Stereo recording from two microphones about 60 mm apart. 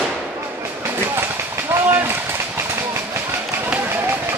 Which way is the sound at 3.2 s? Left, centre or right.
Right.